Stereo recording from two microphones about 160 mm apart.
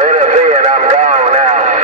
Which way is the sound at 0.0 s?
45° right (ahead or behind).